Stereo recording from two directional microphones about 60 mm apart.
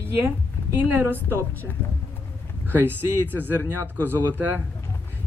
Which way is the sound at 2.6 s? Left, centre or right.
Right.